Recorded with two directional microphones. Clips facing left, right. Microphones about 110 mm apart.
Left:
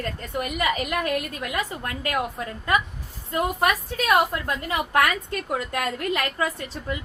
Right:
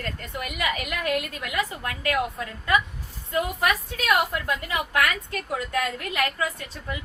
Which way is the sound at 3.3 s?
40° left (ahead or behind).